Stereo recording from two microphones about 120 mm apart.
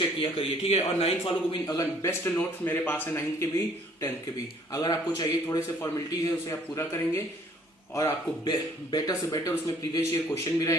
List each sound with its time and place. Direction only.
0.2 s a man's voice: 50° left (ahead or behind)
1.6 s a man's voice: 30° left (ahead or behind)
4.7 s a man's voice: 30° left (ahead or behind)
8.4 s a man's voice: 35° left (ahead or behind)